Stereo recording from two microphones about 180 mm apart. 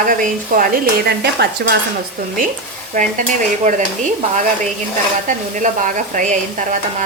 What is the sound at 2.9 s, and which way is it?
Speech, 45° right (ahead or behind).